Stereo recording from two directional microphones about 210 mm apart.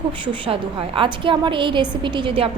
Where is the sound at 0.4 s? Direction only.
25° right (ahead or behind).